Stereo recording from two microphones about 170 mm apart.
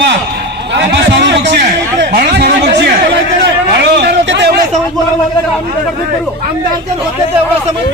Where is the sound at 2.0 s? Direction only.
70° right (ahead or behind).